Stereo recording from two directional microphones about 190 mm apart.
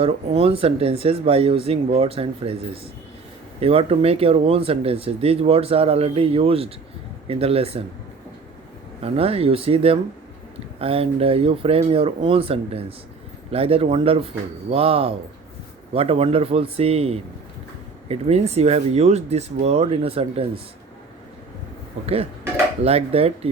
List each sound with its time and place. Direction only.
0.0 s speech: 30° right (ahead or behind)
3.6 s speech: 30° right (ahead or behind)
9.0 s speech: 30° right (ahead or behind)
22.0 s speech: 30° right (ahead or behind)